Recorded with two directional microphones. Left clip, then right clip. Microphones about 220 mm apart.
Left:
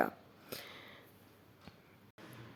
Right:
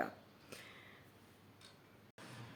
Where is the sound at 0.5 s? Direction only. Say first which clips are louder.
Left 7 dB; 45° left (ahead or behind).